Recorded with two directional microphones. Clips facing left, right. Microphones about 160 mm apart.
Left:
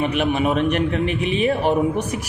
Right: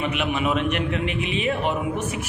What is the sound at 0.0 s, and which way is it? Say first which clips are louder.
A man's voice: left 5 dB; 40° left (ahead or behind).